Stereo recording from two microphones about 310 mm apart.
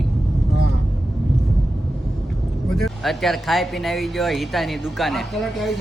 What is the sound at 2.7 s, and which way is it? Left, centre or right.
Speech, centre.